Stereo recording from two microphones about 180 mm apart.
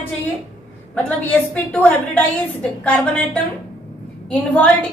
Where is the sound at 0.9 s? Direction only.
10° left (ahead or behind).